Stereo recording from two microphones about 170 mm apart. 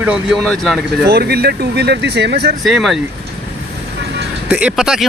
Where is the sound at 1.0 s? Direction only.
65° right (ahead or behind).